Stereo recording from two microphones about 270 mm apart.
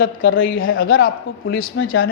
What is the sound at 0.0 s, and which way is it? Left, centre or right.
A woman's voice, left.